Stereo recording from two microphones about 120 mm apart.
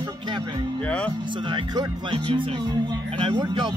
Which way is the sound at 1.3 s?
40° right (ahead or behind).